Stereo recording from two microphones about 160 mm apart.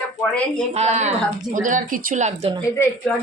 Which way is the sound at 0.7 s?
45° right (ahead or behind).